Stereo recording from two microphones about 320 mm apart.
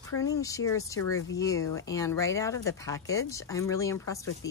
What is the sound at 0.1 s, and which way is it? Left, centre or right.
Speech, centre.